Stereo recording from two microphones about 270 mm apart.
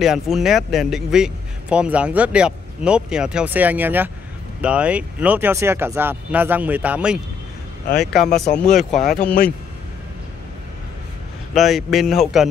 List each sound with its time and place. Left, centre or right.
0.0 s a man's voice: centre
8.9 s speech: left
11.5 s a man's voice: centre